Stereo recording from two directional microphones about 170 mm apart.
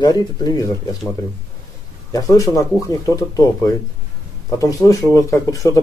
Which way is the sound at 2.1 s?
20° left (ahead or behind).